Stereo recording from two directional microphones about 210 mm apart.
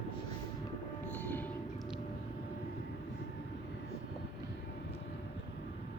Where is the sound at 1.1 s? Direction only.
10° left (ahead or behind).